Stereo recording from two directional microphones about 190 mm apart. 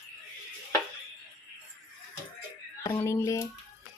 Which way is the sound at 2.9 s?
15° left (ahead or behind).